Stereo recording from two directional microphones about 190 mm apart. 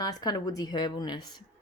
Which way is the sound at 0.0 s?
20° left (ahead or behind).